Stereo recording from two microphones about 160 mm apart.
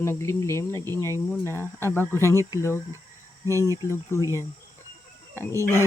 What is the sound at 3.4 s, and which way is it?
Speech, 20° right (ahead or behind).